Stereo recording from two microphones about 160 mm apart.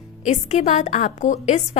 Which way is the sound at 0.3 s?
45° left (ahead or behind).